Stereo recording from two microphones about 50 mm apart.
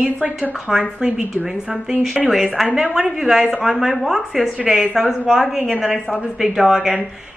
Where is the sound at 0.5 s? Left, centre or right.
Centre.